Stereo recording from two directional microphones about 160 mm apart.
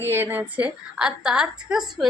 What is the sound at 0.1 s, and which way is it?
A woman's voice, 15° right (ahead or behind).